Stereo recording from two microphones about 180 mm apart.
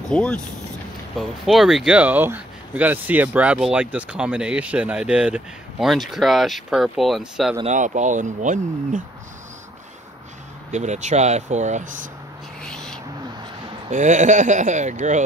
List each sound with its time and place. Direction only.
0.1 s speech: 5° left (ahead or behind)
7.6 s speech: 45° right (ahead or behind)
10.7 s speech: 40° right (ahead or behind)
12.6 s owl: 5° left (ahead or behind)
13.8 s speech: 45° right (ahead or behind)